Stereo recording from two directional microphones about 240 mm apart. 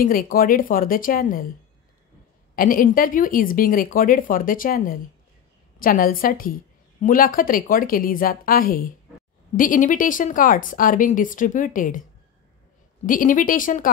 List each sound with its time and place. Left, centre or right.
0.0 s a woman's voice: left
2.5 s a woman's voice: left
13.0 s a woman's voice: left